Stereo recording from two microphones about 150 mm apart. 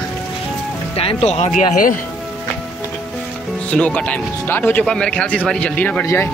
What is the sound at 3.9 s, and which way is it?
Speech, 10° left (ahead or behind).